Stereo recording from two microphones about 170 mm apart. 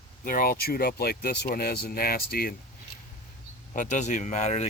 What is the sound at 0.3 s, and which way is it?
Speech, 55° left (ahead or behind).